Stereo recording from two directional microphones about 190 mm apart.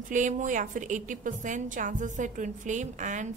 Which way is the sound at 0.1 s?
40° right (ahead or behind).